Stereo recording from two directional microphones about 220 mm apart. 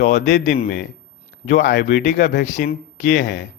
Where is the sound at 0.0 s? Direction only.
50° left (ahead or behind).